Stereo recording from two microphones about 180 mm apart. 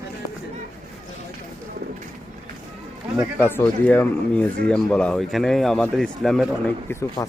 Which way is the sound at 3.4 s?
10° left (ahead or behind).